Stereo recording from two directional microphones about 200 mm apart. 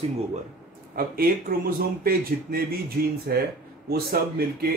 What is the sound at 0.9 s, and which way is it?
A man's voice, 50° right (ahead or behind).